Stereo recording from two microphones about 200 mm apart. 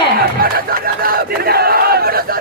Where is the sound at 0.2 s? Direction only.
45° right (ahead or behind).